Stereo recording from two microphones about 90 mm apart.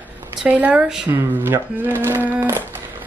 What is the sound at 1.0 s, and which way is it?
Speech, 25° right (ahead or behind).